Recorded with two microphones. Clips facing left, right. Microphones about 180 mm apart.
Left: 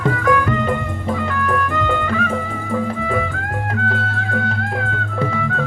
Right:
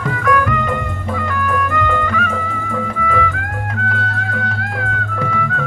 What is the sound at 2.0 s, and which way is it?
Music, 30° left (ahead or behind).